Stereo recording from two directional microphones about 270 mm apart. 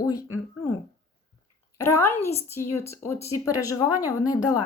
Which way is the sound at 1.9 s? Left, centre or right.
Centre.